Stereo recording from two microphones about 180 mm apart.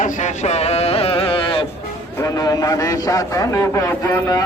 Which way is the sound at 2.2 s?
20° left (ahead or behind).